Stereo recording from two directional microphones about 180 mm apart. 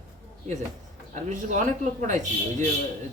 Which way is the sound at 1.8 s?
40° right (ahead or behind).